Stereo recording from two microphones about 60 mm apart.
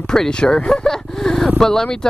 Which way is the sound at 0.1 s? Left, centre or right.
Centre.